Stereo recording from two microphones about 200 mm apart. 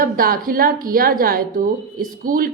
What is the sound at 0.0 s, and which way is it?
A woman's voice, 45° right (ahead or behind).